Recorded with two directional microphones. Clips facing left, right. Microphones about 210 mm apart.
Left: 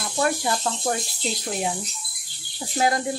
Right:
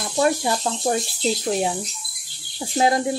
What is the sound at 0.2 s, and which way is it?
Speech, 20° right (ahead or behind).